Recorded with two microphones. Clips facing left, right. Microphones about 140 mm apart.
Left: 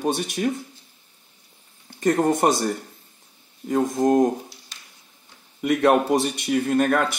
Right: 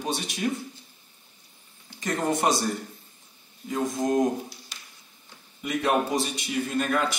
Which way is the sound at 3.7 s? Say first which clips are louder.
Left 6 dB; 50° left (ahead or behind).